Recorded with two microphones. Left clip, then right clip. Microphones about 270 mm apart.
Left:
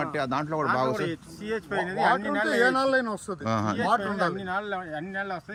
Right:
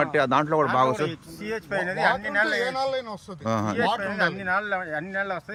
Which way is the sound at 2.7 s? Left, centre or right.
Right.